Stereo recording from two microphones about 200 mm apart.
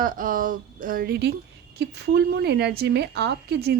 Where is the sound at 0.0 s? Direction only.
45° right (ahead or behind).